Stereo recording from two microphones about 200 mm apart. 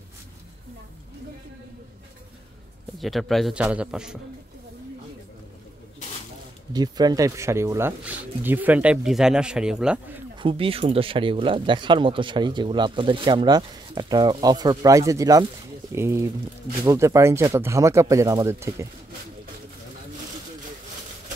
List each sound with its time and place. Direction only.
3.0 s a man's voice: centre (ahead or behind)
6.7 s speech: 20° right (ahead or behind); by 10.1 s 5° right (ahead or behind)
10.3 s speech: 25° right (ahead or behind)